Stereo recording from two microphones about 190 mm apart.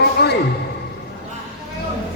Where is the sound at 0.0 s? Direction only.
60° left (ahead or behind).